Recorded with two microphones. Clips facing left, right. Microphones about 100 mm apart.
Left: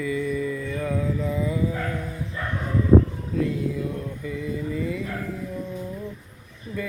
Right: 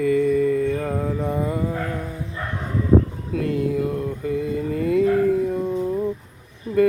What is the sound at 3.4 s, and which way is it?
Mantra, 60° right (ahead or behind).